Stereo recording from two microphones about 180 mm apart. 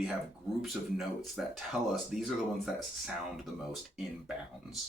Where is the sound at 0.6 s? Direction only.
Centre (ahead or behind).